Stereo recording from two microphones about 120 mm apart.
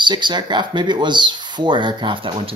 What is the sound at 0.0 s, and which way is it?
Speech, 40° right (ahead or behind).